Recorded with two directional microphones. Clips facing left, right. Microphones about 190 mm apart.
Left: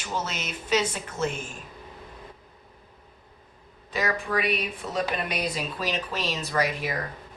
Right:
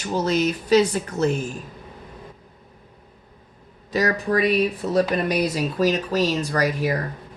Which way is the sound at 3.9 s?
40° right (ahead or behind).